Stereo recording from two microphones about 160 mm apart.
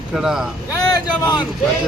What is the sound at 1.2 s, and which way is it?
Speech, 25° left (ahead or behind).